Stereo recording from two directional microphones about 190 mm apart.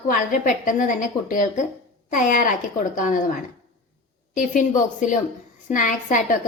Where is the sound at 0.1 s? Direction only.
45° left (ahead or behind).